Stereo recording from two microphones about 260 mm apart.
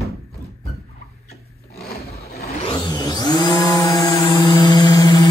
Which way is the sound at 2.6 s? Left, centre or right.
Centre.